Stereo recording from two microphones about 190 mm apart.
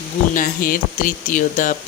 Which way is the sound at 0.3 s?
50° left (ahead or behind).